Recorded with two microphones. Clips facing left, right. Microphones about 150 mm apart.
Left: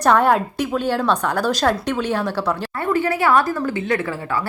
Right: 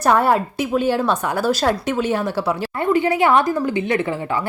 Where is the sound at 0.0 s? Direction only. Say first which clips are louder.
Even; 10° right (ahead or behind).